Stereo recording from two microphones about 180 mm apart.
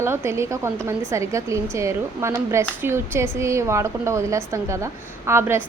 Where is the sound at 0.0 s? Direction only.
15° right (ahead or behind).